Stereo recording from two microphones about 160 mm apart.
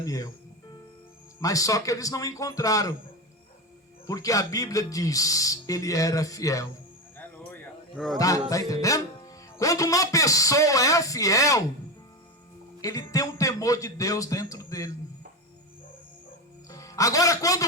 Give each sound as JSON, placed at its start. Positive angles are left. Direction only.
{"t": 0.0, "sound": "speech", "side_deg": 20}
{"t": 1.4, "sound": "music", "side_deg": 20}
{"t": 4.0, "sound": "music", "side_deg": 20}
{"t": 7.9, "sound": "speech", "side_deg": 0}
{"t": 8.2, "sound": "music", "side_deg": 20}
{"t": 12.8, "sound": "music", "side_deg": 20}
{"t": 16.6, "sound": "a man's voice", "side_deg": 20}